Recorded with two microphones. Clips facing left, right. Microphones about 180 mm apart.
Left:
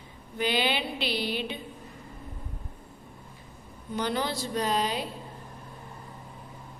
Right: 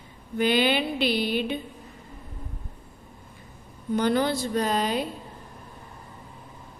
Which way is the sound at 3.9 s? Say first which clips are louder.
Right 6 dB; 50° right (ahead or behind).